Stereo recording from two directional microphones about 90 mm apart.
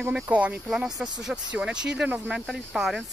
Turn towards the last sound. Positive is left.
turn(degrees=0)  # may be behind; listen again after turning